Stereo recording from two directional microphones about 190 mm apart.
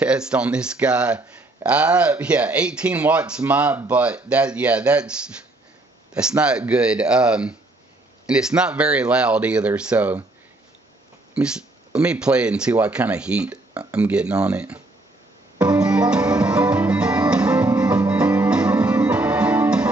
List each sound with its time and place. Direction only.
0.0 s speech: 5° right (ahead or behind)
6.1 s speech: 5° right (ahead or behind)
11.3 s speech: 5° right (ahead or behind)
15.6 s music: 5° right (ahead or behind)